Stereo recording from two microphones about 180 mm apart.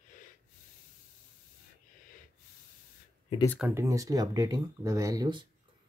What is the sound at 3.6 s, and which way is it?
Speech, 15° right (ahead or behind).